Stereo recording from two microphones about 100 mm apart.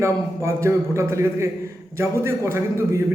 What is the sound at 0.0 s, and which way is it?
A man's voice, 30° right (ahead or behind).